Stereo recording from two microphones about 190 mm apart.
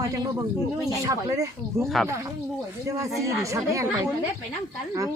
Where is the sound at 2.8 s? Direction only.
15° right (ahead or behind).